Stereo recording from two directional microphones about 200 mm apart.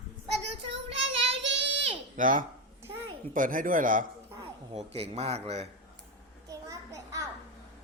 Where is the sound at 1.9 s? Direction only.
40° right (ahead or behind).